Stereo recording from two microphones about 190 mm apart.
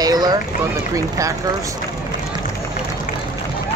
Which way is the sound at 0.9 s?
15° right (ahead or behind).